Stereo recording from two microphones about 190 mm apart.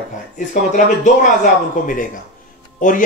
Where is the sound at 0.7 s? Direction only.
40° left (ahead or behind).